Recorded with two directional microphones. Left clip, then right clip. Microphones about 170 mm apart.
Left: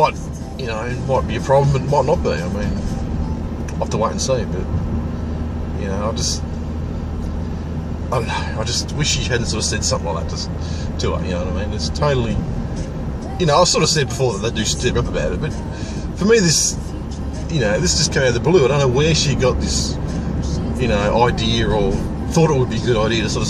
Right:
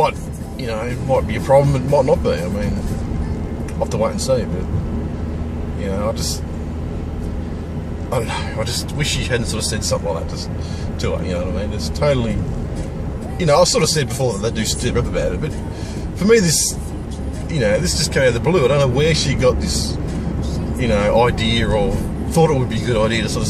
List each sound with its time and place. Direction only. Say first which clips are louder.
1.3 s speech: right 2 dB; 15° right (ahead or behind)
3.9 s speech: right 1 dB; 15° right (ahead or behind)
8.1 s speech: left 1 dB; 15° right (ahead or behind)
11.8 s speech: right 1 dB; 15° right (ahead or behind)
13.4 s speech: right 1 dB; 15° right (ahead or behind)
16.3 s speech: even; 15° right (ahead or behind)
20.8 s speech: right 1 dB; 20° right (ahead or behind)